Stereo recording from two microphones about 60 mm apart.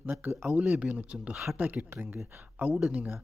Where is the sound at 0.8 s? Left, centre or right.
Right.